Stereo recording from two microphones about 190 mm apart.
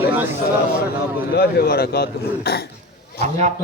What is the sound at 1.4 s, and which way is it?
Speech, 55° left (ahead or behind).